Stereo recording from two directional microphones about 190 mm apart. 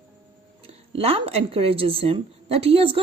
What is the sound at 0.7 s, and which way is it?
A woman's voice, 30° right (ahead or behind).